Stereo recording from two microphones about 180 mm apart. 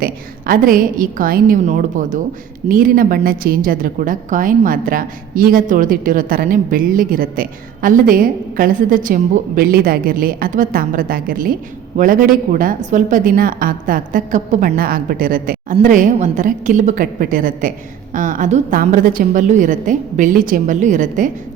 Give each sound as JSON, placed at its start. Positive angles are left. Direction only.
{"t": 0.0, "sound": "a woman's voice", "side_deg": -50}